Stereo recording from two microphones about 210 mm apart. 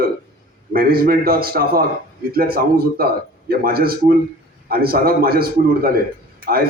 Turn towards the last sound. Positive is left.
turn(degrees=-45)  # may be behind; listen again after turning